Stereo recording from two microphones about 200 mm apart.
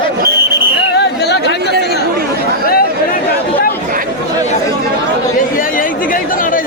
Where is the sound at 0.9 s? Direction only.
55° left (ahead or behind).